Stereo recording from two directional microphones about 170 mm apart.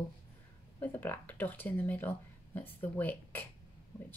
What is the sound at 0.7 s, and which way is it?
Speech, 10° left (ahead or behind).